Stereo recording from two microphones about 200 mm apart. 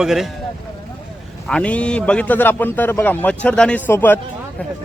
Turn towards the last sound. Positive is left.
turn(degrees=10)  # may be behind; listen again after turning